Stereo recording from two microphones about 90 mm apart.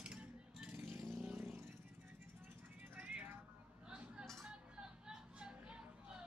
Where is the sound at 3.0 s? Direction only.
15° right (ahead or behind).